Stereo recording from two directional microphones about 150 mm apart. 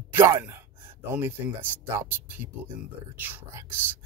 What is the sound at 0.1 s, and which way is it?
Speech, 15° right (ahead or behind).